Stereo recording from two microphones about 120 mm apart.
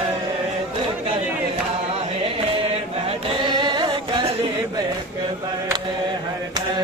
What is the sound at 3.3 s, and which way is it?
Singing, 40° right (ahead or behind).